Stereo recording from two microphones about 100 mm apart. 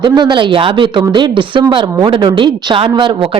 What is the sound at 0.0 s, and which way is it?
A woman's voice, 50° right (ahead or behind).